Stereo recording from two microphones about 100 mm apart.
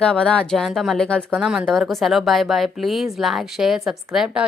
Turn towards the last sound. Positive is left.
turn(degrees=-5)  # may be behind; listen again after turning